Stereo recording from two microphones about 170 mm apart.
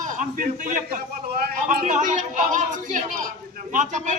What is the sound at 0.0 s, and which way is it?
A man's voice, 50° right (ahead or behind).